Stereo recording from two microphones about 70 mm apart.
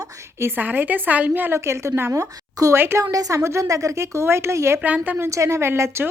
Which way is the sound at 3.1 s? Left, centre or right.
Right.